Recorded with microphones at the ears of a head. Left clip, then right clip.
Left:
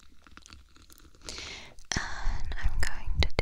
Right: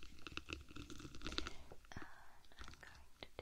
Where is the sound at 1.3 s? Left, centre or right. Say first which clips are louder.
Left 8 dB; left.